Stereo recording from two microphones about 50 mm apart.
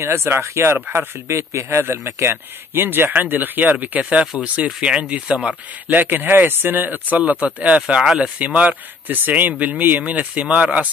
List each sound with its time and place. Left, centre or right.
0.0 s a man's voice: right
0.9 s a man's voice: right
3.1 s speech: right
4.6 s speech: centre
5.9 s speech: right
9.0 s speech: right